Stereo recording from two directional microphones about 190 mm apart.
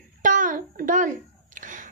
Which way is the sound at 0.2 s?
45° right (ahead or behind).